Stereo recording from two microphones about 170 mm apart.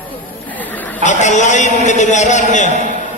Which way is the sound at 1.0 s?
45° left (ahead or behind).